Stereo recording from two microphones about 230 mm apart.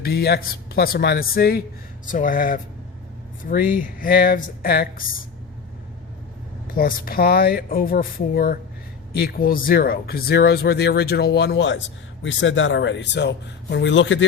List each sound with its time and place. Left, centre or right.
0.0 s speech: left
6.7 s speech: left